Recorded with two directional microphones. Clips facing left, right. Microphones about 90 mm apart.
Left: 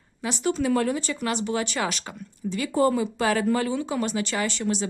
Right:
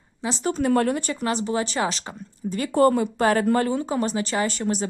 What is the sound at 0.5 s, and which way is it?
Speech, 50° right (ahead or behind).